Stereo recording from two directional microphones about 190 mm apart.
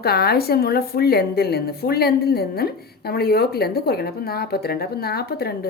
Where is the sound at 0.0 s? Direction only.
55° left (ahead or behind).